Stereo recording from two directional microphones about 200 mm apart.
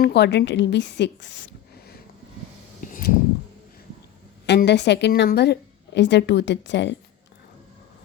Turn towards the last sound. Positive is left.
turn(degrees=60)  # may be behind; listen again after turning